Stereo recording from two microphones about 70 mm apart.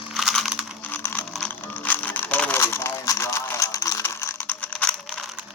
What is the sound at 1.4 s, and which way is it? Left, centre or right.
Music, left.